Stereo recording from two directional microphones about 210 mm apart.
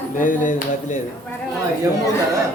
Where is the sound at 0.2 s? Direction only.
40° left (ahead or behind).